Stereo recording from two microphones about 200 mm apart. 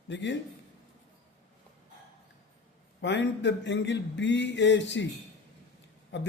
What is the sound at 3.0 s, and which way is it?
A man's voice, 65° left (ahead or behind).